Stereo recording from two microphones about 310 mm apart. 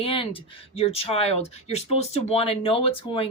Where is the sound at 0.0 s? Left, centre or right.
Centre.